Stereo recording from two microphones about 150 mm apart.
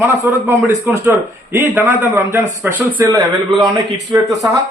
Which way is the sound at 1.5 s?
15° right (ahead or behind).